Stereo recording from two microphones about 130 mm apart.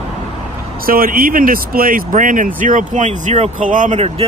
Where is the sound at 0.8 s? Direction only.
90° right; by 4.3 s 60° right (ahead or behind).